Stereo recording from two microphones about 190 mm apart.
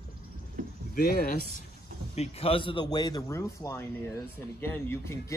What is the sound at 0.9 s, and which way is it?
Speech, 50° left (ahead or behind).